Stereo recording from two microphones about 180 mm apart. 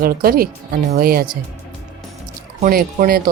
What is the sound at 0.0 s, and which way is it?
Speech, 55° right (ahead or behind).